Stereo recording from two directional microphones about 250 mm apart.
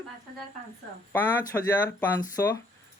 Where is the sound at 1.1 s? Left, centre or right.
Centre.